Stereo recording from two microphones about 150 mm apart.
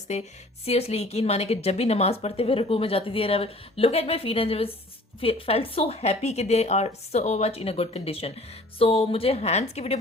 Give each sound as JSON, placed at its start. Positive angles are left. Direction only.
{"t": 0.1, "sound": "a woman's voice", "side_deg": 45}